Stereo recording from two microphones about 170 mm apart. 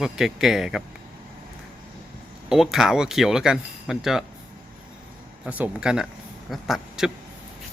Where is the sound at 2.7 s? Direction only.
5° right (ahead or behind).